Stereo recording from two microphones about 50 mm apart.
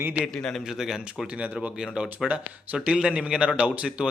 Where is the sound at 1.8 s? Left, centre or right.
Centre.